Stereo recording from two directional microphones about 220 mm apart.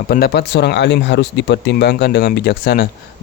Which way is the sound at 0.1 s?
45° left (ahead or behind).